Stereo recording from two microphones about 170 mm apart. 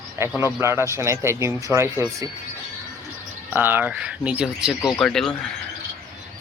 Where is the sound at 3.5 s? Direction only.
10° right (ahead or behind).